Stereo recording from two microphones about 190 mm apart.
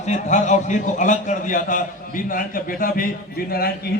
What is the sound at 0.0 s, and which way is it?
A man's voice, 40° left (ahead or behind).